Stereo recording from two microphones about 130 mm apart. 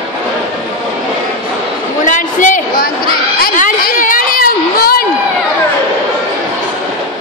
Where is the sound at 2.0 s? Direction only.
80° left.